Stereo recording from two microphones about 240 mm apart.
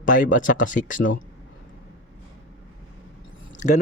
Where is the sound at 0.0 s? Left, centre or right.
Left.